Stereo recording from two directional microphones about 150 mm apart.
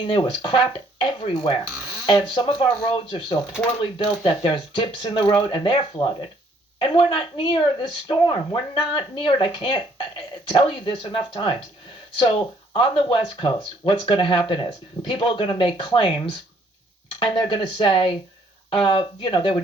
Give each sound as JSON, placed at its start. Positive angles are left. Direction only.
{"t": 0.0, "sound": "speech", "side_deg": 35}